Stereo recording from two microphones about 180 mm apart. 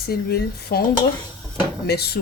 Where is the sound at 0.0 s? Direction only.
60° left (ahead or behind).